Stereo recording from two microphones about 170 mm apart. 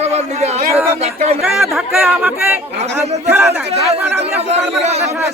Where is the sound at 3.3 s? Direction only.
15° right (ahead or behind).